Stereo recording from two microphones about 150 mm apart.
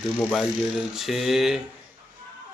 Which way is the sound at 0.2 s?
5° left (ahead or behind).